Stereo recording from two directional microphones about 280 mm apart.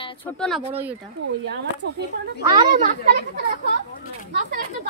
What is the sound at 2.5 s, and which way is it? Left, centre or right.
Speech, right.